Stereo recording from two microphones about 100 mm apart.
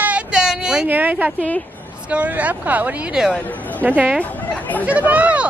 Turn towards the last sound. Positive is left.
turn(degrees=-15)  # may be behind; listen again after turning